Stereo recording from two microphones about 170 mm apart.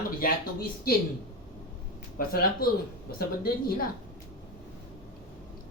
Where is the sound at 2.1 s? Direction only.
60° left (ahead or behind).